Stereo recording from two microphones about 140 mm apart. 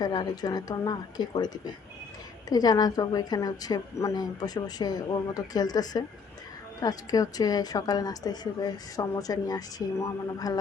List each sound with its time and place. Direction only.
0.0 s a woman's voice: 30° left (ahead or behind)